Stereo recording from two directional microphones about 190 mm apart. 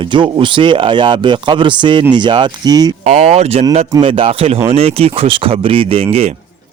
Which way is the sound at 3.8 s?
20° right (ahead or behind).